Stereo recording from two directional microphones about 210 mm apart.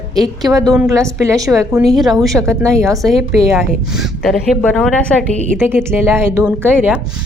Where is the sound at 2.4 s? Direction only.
15° right (ahead or behind).